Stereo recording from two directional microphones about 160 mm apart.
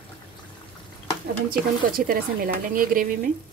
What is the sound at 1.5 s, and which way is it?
Speech, 65° right (ahead or behind).